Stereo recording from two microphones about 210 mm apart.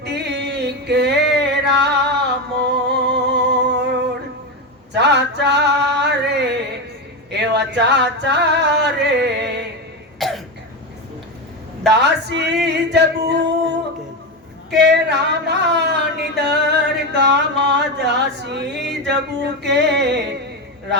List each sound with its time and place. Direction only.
0.0 s music: 50° right (ahead or behind)
4.9 s male singing: 55° right (ahead or behind)
7.3 s a sound: 55° right (ahead or behind)
10.2 s cough: centre (ahead or behind)
11.9 s male singing: 55° right (ahead or behind)
14.7 s a sound: 55° right (ahead or behind)